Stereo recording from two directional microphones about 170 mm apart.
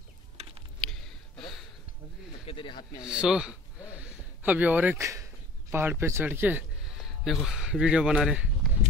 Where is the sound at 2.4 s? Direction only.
30° left (ahead or behind).